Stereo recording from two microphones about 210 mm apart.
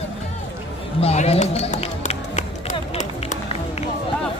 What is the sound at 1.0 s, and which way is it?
Run, 30° left (ahead or behind).